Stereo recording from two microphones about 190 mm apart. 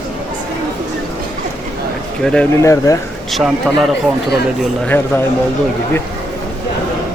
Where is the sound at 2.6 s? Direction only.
15° left (ahead or behind).